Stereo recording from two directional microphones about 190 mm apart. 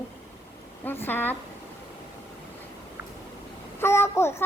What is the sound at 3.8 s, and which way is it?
Speech, 15° left (ahead or behind).